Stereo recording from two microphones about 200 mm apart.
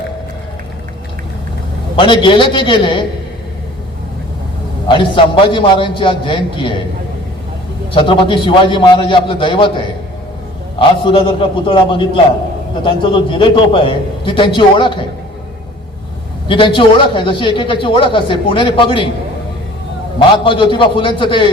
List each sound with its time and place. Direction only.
2.0 s a man's voice: 25° left (ahead or behind)
4.9 s a man's voice: 25° left (ahead or behind)
7.9 s a man's voice: 25° left (ahead or behind)
16.5 s a man's voice: 25° left (ahead or behind)
20.1 s a man's voice: 25° left (ahead or behind)